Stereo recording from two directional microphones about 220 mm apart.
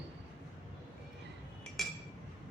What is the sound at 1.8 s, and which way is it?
Chink, centre (ahead or behind).